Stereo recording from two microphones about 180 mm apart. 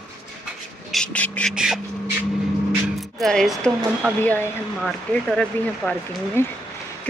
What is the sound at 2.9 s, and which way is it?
Speech, centre (ahead or behind).